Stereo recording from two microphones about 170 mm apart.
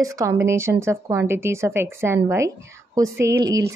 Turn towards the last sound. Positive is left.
turn(degrees=-20)  # may be behind; listen again after turning